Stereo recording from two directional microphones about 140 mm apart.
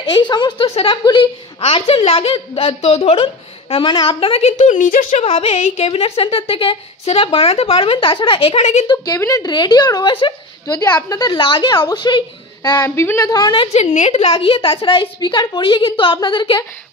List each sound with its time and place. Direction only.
0.1 s a woman's voice: 35° left (ahead or behind); by 5.2 s 75° left (ahead or behind)
5.2 s a woman's voice: 45° left (ahead or behind)
8.8 s a woman's voice: 25° left (ahead or behind)
12.8 s a woman's voice: 20° left (ahead or behind)
13.7 s a woman's voice: 55° left (ahead or behind); by 16.6 s 35° left (ahead or behind)